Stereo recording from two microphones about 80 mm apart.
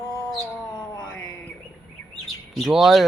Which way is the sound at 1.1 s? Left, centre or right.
Centre.